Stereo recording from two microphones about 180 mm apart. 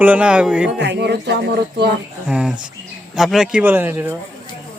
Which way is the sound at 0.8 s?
70° right (ahead or behind).